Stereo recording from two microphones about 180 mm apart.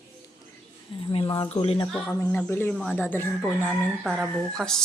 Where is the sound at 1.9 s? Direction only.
10° left (ahead or behind).